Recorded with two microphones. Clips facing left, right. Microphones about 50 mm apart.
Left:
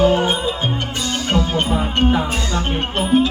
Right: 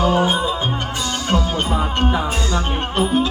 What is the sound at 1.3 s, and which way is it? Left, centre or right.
Music, left.